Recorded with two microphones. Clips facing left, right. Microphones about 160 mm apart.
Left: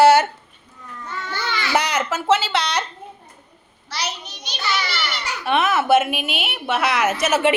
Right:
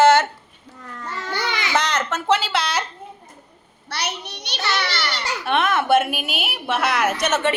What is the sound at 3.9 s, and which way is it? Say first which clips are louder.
A child's voice: right 1 dB; 60° right (ahead or behind).